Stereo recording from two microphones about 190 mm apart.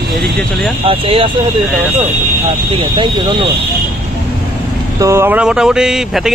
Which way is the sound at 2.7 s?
25° right (ahead or behind).